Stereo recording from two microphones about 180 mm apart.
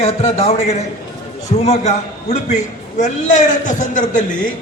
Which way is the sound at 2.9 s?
45° left (ahead or behind).